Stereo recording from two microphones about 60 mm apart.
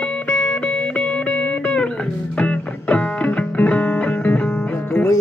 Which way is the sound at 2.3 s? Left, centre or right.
Left.